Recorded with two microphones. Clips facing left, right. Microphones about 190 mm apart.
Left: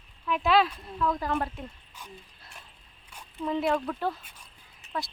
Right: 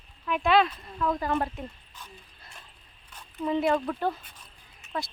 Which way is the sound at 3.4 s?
Centre (ahead or behind).